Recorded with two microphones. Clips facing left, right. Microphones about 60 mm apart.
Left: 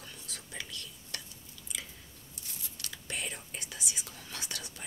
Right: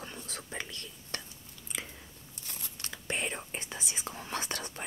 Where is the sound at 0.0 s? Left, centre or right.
Right.